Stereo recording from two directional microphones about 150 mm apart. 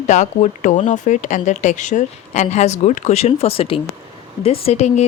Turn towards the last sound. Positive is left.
turn(degrees=45)  # may be behind; listen again after turning